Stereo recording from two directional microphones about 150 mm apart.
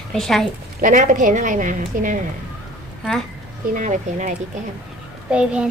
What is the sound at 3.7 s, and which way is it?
Speech, 55° right (ahead or behind).